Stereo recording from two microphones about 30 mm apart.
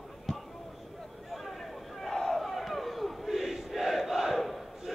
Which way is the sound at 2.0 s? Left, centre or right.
Centre.